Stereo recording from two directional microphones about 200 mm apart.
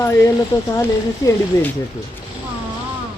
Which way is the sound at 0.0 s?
15° left (ahead or behind).